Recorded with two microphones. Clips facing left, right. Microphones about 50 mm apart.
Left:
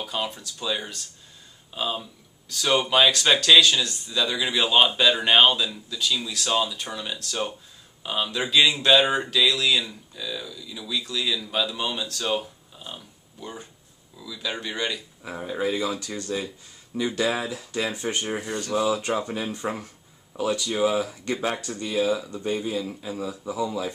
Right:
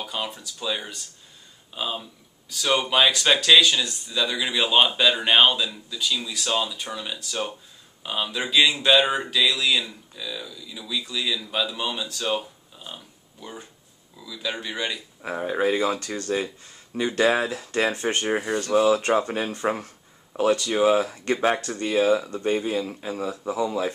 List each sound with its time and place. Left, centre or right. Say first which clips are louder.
0.0 s speech: left 1 dB; centre
15.2 s speech: right 4 dB; right
16.3 s speech: right 3 dB; right